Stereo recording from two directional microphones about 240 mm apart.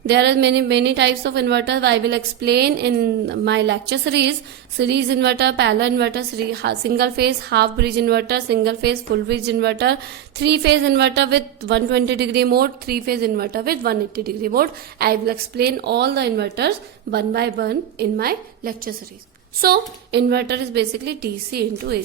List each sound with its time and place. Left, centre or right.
0.1 s a woman's voice: right